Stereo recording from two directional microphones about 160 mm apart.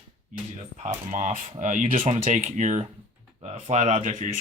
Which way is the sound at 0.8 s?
45° right (ahead or behind).